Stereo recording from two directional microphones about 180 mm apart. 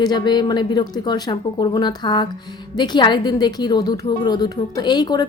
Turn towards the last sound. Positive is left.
turn(degrees=25)  # may be behind; listen again after turning